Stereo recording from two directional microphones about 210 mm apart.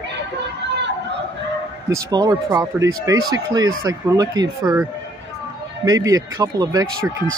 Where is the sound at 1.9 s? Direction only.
20° right (ahead or behind).